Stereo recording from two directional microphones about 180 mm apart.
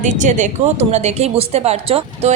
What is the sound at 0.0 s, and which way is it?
Speech, 45° right (ahead or behind).